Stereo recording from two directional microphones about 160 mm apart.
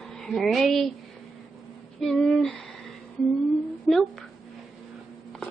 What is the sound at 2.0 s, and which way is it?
Speech, 5° left (ahead or behind).